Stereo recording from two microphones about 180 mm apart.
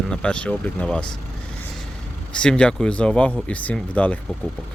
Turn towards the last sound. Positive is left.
turn(degrees=5)  # may be behind; listen again after turning